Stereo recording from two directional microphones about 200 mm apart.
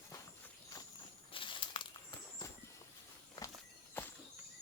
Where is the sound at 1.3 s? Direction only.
25° left (ahead or behind).